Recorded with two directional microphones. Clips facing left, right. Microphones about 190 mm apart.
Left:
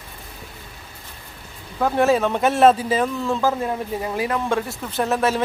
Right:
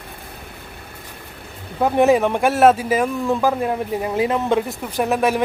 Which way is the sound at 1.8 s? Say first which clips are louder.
Right 3 dB; 15° right (ahead or behind).